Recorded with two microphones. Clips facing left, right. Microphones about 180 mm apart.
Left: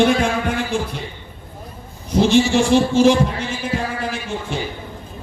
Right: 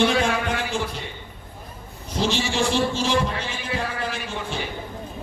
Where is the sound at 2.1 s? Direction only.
55° left (ahead or behind).